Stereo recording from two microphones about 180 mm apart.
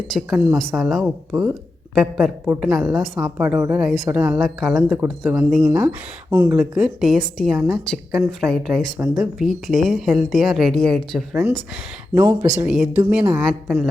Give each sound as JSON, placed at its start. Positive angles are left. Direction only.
{"t": 0.1, "sound": "speech", "side_deg": -5}
{"t": 5.6, "sound": "speech", "side_deg": -15}
{"t": 12.1, "sound": "speech", "side_deg": -10}